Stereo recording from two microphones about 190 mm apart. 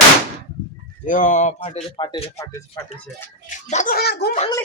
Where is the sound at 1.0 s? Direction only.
40° left (ahead or behind).